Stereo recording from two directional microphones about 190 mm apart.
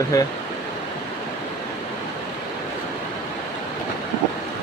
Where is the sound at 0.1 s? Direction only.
20° left (ahead or behind).